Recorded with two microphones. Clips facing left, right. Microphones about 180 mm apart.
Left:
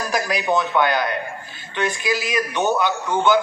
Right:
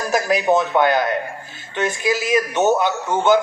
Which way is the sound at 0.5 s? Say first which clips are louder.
Right 2 dB; 40° right (ahead or behind).